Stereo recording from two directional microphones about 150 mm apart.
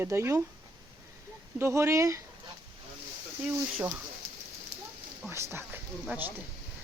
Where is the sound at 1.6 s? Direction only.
15° right (ahead or behind).